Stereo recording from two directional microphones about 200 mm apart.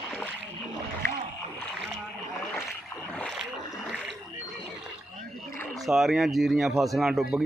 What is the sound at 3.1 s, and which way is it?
Boat, 5° left (ahead or behind).